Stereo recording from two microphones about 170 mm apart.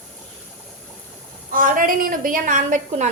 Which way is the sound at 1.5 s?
55° right (ahead or behind).